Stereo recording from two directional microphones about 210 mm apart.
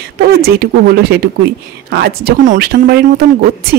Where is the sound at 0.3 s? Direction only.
45° right (ahead or behind).